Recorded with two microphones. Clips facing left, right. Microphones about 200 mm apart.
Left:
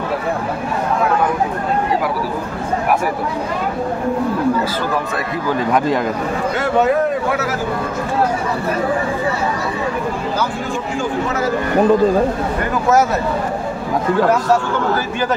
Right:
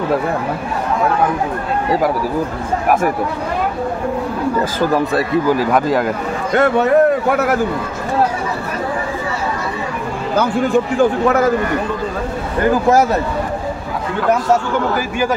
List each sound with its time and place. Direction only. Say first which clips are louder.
5.6 s speech: right 1 dB; 5° right (ahead or behind)
6.5 s speech: right 4 dB; 60° right (ahead or behind)